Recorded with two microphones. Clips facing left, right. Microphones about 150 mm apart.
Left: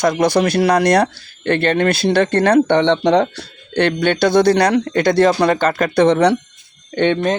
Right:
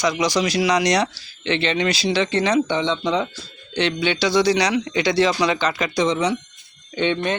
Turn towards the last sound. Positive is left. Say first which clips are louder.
# left 6 dB
turn(degrees=45)  # may be behind; listen again after turning